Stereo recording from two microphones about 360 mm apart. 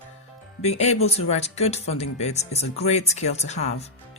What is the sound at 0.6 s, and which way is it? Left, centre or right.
Speech, centre.